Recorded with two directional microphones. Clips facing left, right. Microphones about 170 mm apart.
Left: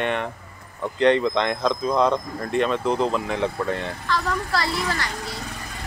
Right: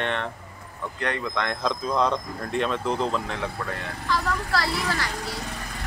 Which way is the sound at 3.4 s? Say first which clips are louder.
Left 7 dB; 25° left (ahead or behind).